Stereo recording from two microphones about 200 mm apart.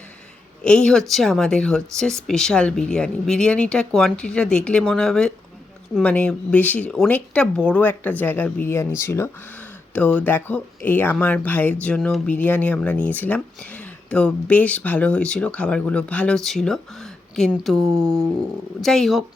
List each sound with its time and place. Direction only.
0.6 s speech: 5° left (ahead or behind)
17.7 s a sound: 15° right (ahead or behind)
18.8 s speech: centre (ahead or behind)